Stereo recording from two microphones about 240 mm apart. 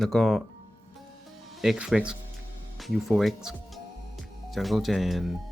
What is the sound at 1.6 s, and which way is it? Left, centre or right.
Speech, centre.